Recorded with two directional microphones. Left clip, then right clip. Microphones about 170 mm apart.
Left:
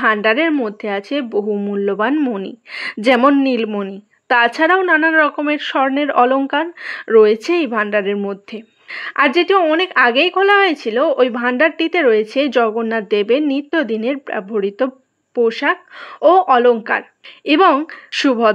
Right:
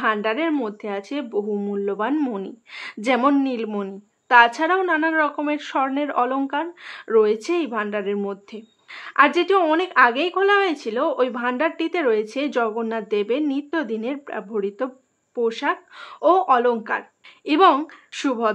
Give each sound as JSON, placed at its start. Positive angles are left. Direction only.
{"t": 0.0, "sound": "a woman's voice", "side_deg": 35}
{"t": 2.1, "sound": "a woman's voice", "side_deg": 20}
{"t": 2.4, "sound": "a woman's voice", "side_deg": 35}